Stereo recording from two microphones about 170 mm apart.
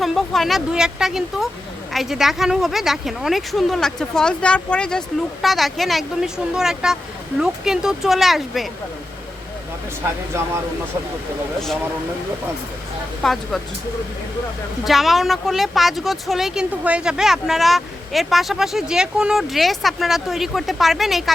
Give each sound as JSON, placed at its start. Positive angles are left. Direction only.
{"t": 0.0, "sound": "speech", "side_deg": 0}
{"t": 13.2, "sound": "speech", "side_deg": 0}
{"t": 14.8, "sound": "speech", "side_deg": 0}